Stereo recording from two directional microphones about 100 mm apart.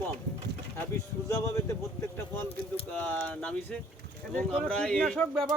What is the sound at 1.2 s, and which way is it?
Speech, 30° left (ahead or behind).